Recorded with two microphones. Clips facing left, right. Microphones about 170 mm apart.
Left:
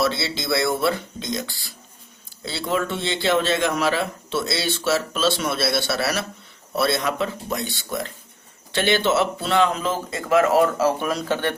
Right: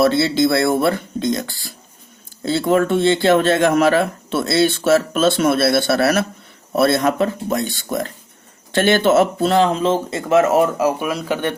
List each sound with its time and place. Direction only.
0.0 s speech: 50° right (ahead or behind); by 11.5 s 15° right (ahead or behind)